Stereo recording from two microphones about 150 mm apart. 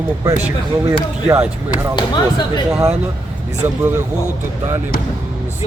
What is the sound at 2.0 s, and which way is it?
Speech, 30° left (ahead or behind).